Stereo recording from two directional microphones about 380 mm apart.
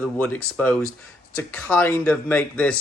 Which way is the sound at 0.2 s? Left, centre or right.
Centre.